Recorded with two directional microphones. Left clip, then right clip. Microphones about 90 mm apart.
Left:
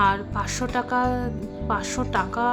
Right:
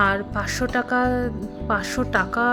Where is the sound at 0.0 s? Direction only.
40° right (ahead or behind).